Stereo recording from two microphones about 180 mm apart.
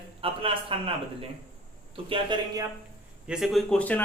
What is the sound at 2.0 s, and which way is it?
Speech, 30° right (ahead or behind).